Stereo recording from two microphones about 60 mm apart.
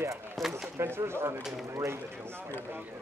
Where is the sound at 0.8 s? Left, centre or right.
Right.